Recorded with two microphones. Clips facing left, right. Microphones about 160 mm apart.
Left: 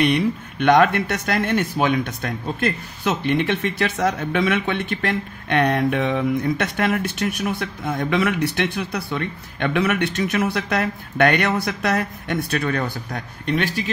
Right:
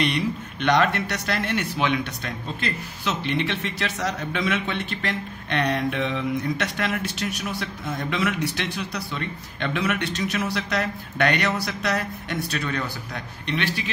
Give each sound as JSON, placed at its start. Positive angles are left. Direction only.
{"t": 0.0, "sound": "speech", "side_deg": 55}